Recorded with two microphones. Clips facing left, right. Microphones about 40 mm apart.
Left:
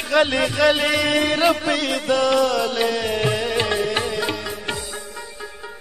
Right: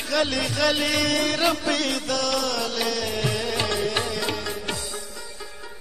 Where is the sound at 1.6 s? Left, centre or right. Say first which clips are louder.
Left 3 dB; centre.